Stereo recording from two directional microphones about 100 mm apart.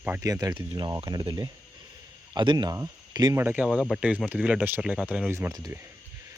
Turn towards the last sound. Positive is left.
turn(degrees=-20)  # may be behind; listen again after turning